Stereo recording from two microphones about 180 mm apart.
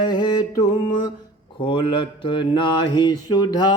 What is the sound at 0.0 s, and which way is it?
Mantra, 25° left (ahead or behind).